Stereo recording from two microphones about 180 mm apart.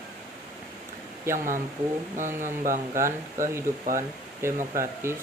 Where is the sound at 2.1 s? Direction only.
45° right (ahead or behind).